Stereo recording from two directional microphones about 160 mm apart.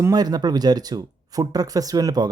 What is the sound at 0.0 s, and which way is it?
Speech, 25° right (ahead or behind).